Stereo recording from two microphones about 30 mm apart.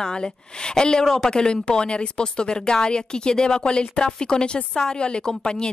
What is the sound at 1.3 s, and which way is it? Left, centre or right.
Speech, left.